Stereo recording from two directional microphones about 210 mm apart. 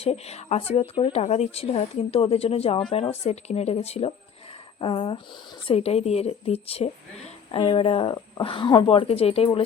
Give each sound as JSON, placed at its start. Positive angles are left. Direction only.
{"t": 0.0, "sound": "speech", "side_deg": 30}